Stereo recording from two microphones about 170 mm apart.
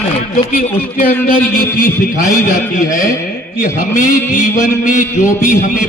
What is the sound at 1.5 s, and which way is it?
Speech, 55° left (ahead or behind).